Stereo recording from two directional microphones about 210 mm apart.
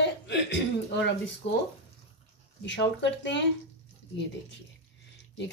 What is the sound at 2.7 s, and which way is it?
Speech, 55° left (ahead or behind).